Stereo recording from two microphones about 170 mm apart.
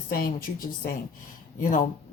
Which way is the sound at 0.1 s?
60° left (ahead or behind).